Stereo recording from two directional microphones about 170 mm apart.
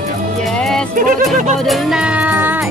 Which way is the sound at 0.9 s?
50° right (ahead or behind).